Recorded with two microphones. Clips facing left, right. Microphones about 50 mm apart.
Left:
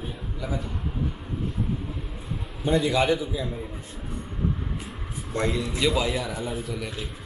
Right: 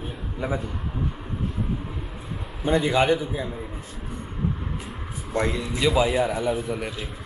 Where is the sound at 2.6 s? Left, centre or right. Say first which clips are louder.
Right 2 dB; centre.